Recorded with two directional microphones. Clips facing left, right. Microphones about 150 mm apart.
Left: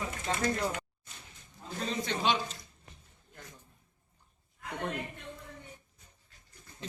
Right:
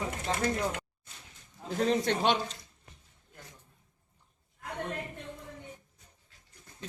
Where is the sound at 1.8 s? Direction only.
65° right (ahead or behind).